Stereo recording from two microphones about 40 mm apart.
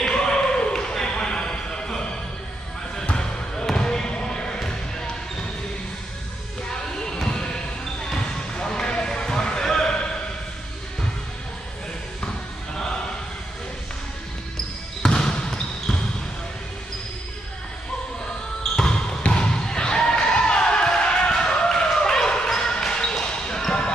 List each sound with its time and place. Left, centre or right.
0.1 s basketball bounce: left
3.1 s basketball bounce: centre
7.2 s basketball bounce: centre
8.6 s basketball bounce: centre
15.0 s trickle: centre
18.6 s basketball bounce: centre